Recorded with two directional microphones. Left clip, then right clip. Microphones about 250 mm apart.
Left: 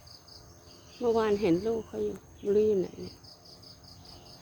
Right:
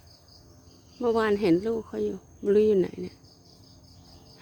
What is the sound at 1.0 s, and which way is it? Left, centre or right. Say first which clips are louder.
Speech: right 2 dB; right.